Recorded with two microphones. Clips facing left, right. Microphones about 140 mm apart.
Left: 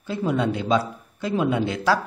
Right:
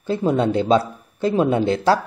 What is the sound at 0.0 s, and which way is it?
Speech, 30° right (ahead or behind).